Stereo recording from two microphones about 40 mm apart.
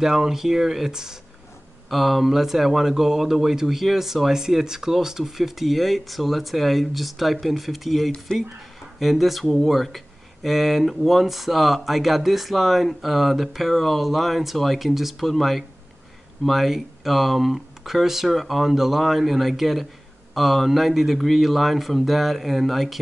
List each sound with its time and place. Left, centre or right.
0.0 s speech: centre
8.3 s speech: left
9.0 s speech: centre